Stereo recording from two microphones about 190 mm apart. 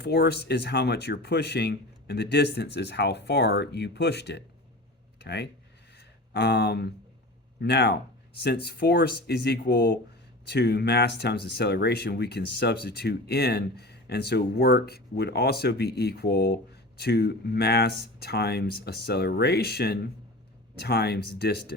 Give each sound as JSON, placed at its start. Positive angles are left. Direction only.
{"t": 0.0, "sound": "speech", "side_deg": 60}
{"t": 6.0, "sound": "a sound", "side_deg": 60}
{"t": 7.6, "sound": "speech", "side_deg": 60}